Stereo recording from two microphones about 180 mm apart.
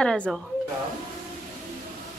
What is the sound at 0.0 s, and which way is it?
Speech, 5° left (ahead or behind).